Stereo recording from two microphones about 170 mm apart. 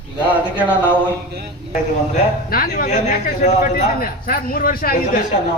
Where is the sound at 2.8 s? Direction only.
45° left (ahead or behind).